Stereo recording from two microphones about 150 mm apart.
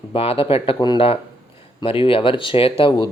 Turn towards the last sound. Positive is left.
turn(degrees=35)  # may be behind; listen again after turning